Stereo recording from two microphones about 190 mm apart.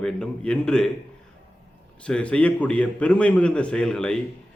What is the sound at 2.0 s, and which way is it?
Speech, 5° left (ahead or behind).